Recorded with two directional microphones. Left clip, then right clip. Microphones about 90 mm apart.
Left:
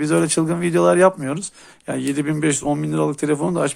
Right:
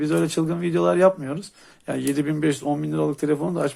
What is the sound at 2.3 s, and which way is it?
Speech, 30° left (ahead or behind).